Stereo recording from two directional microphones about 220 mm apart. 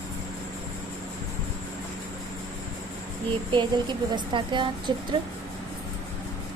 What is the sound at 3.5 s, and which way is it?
Speech, 20° right (ahead or behind).